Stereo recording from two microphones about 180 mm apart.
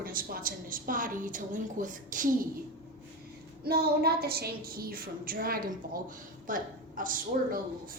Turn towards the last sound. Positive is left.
turn(degrees=-50)  # may be behind; listen again after turning